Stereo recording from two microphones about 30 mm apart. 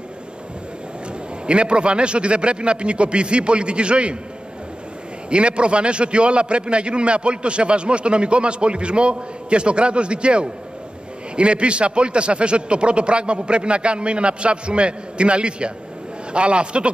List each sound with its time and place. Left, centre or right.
1.4 s a man's voice: right
5.3 s a man's voice: right